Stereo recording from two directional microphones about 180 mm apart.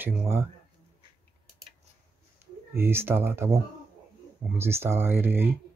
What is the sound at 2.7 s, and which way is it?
Speech, 15° right (ahead or behind).